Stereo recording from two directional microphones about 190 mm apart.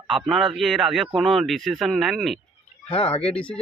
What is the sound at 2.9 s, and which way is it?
Speech, 30° left (ahead or behind).